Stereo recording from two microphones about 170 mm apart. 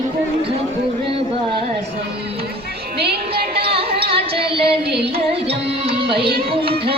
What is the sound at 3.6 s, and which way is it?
Music, 35° right (ahead or behind).